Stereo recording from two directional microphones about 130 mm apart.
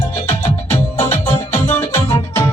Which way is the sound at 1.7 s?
20° left (ahead or behind).